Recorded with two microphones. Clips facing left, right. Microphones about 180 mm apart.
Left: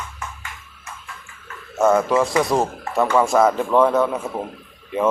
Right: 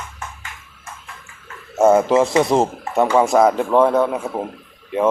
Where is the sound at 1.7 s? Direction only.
25° right (ahead or behind).